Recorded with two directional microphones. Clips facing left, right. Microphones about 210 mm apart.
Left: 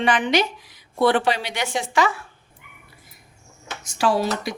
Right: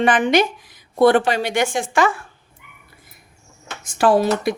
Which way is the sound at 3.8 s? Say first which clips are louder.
Right 5 dB; 55° right (ahead or behind).